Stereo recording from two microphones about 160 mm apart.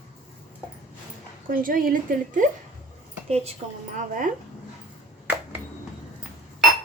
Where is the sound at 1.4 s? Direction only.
60° right (ahead or behind).